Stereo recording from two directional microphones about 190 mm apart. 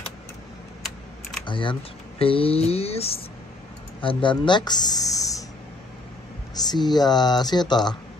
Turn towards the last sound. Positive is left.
turn(degrees=20)  # may be behind; listen again after turning